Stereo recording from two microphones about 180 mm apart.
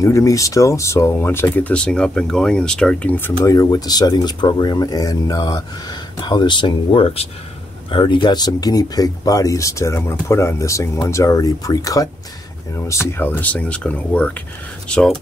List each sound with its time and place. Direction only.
0.0 s speech: 15° left (ahead or behind)